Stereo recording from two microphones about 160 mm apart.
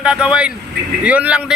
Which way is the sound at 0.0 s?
5° right (ahead or behind).